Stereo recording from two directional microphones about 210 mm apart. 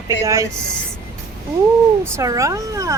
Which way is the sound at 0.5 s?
5° left (ahead or behind).